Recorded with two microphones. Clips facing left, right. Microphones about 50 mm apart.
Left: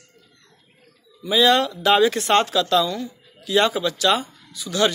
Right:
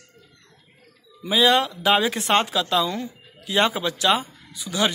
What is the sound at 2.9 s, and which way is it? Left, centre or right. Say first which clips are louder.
Speech: even; right.